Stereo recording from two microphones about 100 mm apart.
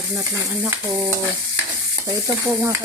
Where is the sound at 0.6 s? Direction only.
25° right (ahead or behind).